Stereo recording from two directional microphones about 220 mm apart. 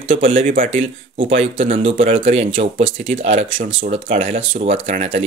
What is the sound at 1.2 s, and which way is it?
Speech, 25° right (ahead or behind).